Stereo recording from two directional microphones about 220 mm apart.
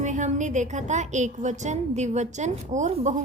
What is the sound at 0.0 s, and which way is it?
A woman's voice, 35° right (ahead or behind).